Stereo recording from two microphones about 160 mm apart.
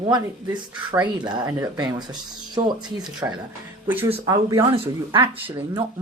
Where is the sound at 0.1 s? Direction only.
25° right (ahead or behind); by 4.1 s 10° right (ahead or behind).